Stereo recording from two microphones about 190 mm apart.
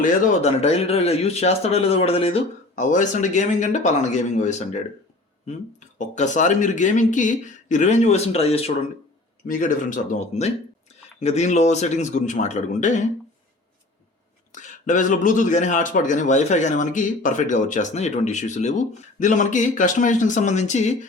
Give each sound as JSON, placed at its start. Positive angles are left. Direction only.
{"t": 0.0, "sound": "a man's voice", "side_deg": 40}
{"t": 6.0, "sound": "a man's voice", "side_deg": 40}
{"t": 9.5, "sound": "a man's voice", "side_deg": 45}
{"t": 14.5, "sound": "a man's voice", "side_deg": 40}